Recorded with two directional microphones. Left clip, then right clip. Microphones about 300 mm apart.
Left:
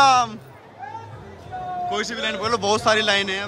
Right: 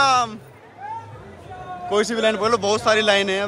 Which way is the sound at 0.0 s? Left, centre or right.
Centre.